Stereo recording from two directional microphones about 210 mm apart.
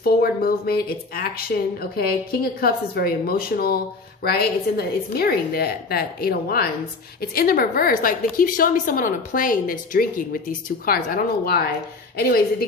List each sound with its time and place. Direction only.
0.0 s a woman's voice: 45° left (ahead or behind)